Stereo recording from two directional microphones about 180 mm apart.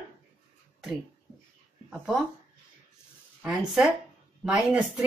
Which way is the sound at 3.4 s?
5° right (ahead or behind).